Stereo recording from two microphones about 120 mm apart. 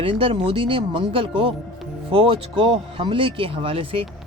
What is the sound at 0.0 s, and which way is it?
Speech, 50° right (ahead or behind).